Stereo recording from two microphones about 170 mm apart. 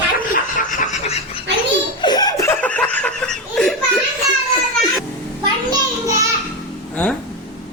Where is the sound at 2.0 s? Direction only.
25° left (ahead or behind); by 4.0 s 5° left (ahead or behind).